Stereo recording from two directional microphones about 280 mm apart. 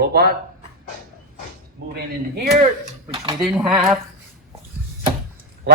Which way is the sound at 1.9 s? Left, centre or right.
Right.